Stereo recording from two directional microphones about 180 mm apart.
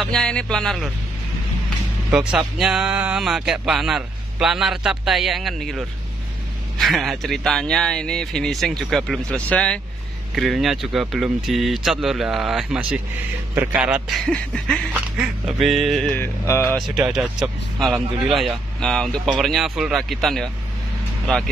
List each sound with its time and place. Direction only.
0.0 s speech: 5° left (ahead or behind)
2.0 s speech: centre (ahead or behind)
16.2 s a sound: 15° left (ahead or behind)
16.7 s speech: centre (ahead or behind)